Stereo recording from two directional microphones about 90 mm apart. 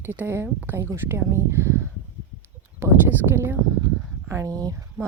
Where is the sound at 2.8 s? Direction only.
25° right (ahead or behind).